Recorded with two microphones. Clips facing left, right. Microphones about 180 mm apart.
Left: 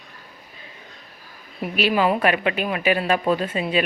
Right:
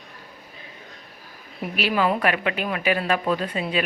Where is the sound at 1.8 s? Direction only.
15° left (ahead or behind).